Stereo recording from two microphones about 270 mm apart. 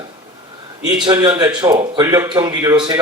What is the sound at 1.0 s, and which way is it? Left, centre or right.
A man's voice, centre.